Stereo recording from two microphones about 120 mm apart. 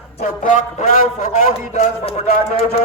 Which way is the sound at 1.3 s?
70° left (ahead or behind).